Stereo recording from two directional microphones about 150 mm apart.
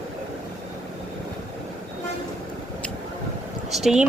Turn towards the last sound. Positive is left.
turn(degrees=-5)  # may be behind; listen again after turning